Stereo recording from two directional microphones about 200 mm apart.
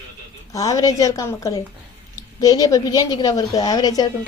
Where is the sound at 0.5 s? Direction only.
15° left (ahead or behind).